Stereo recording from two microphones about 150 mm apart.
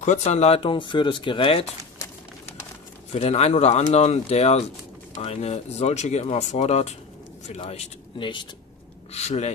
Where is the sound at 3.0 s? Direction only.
45° left (ahead or behind).